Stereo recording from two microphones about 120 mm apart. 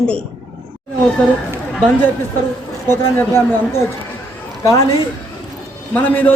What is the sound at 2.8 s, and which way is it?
Speech, 20° left (ahead or behind).